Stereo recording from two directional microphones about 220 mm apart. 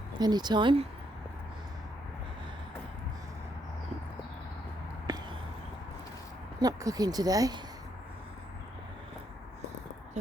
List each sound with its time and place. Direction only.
0.1 s speech: 20° right (ahead or behind)
5.1 s a sound: 20° right (ahead or behind)
6.6 s speech: 15° right (ahead or behind)